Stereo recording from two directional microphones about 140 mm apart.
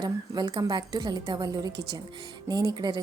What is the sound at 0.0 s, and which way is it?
A woman's voice, 30° right (ahead or behind).